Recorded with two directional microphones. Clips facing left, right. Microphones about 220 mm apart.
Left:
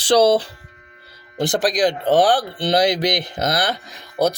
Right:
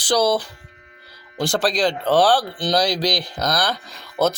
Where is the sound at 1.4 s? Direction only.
15° left (ahead or behind).